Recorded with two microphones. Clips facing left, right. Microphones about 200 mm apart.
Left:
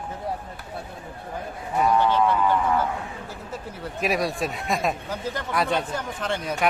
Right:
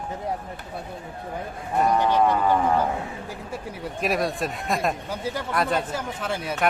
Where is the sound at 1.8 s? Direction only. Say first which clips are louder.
Even; 15° right (ahead or behind).